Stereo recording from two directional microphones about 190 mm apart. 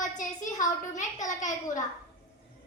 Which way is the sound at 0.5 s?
40° left (ahead or behind).